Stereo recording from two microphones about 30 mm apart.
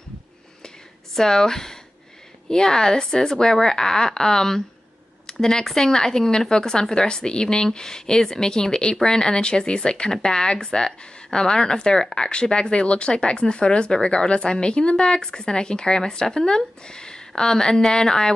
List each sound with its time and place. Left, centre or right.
1.1 s a woman's voice: centre